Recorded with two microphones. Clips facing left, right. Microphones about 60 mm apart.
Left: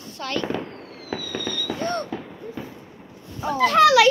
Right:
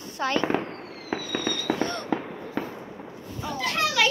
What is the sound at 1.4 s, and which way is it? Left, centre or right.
Fireworks, right.